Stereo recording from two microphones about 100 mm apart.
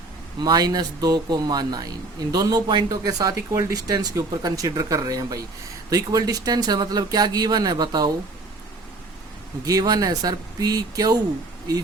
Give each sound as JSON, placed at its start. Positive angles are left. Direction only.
{"t": 0.3, "sound": "speech", "side_deg": -40}
{"t": 9.6, "sound": "speech", "side_deg": -40}